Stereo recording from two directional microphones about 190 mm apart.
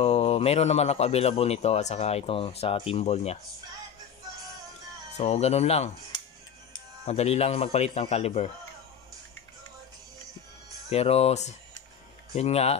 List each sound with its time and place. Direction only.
0.0 s a man's voice: 30° left (ahead or behind)
5.1 s a man's voice: 35° left (ahead or behind)
10.9 s a man's voice: 35° left (ahead or behind)